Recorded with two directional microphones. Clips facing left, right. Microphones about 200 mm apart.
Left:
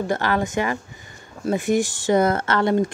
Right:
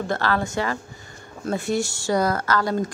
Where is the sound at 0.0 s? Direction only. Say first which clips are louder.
Left 2 dB; 15° left (ahead or behind).